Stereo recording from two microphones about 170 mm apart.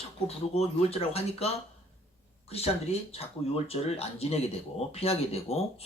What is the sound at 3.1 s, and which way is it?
Speech, 35° left (ahead or behind).